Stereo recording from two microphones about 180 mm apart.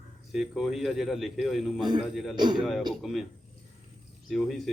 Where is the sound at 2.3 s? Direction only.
25° right (ahead or behind).